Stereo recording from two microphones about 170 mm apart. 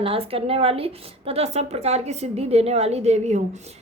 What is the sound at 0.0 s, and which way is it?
A woman's voice, 35° right (ahead or behind).